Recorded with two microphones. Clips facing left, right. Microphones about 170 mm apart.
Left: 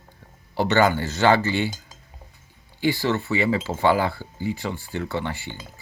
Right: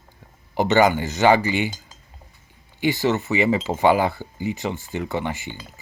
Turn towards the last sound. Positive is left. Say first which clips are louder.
# right 2 dB
turn(degrees=-15)  # may be behind; listen again after turning